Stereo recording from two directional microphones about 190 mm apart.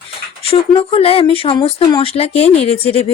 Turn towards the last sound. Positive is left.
turn(degrees=30)  # may be behind; listen again after turning